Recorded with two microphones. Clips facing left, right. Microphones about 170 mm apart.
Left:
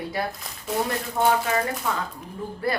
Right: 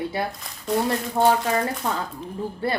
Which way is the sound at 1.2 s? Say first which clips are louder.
Right 2 dB; 35° right (ahead or behind).